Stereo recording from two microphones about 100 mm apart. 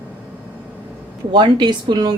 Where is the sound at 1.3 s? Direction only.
50° right (ahead or behind).